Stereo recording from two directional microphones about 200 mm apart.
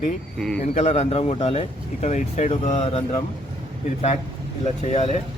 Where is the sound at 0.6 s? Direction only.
35° left (ahead or behind).